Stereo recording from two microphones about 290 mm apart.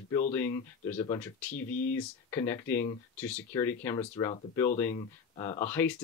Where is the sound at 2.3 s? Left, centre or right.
Centre.